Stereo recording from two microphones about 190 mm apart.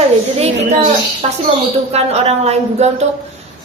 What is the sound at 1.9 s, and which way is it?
A woman's voice, 35° right (ahead or behind).